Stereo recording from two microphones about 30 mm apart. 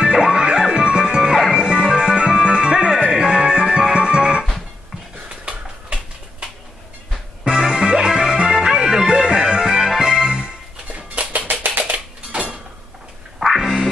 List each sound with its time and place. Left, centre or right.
0.0 s music: right
7.4 s music: right
10.2 s music: right
11.3 s music: right
11.9 s dishes: right
13.6 s quack: centre